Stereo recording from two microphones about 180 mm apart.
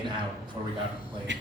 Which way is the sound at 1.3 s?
80° right.